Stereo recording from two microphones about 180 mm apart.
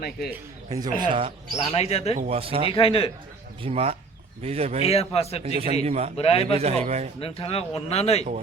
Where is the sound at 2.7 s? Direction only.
30° left (ahead or behind).